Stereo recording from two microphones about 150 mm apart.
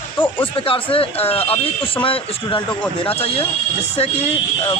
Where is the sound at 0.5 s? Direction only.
35° left (ahead or behind).